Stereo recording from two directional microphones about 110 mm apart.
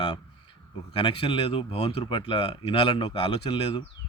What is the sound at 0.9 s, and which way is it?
A man's voice, 55° left (ahead or behind).